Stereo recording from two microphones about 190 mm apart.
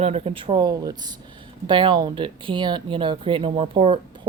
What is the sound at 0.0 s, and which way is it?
Speech, 30° right (ahead or behind).